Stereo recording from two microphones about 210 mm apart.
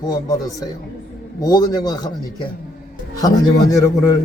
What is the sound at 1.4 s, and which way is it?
A man's voice, 20° left (ahead or behind).